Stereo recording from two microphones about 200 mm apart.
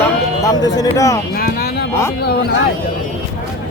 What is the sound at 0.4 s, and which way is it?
Speech, 15° left (ahead or behind).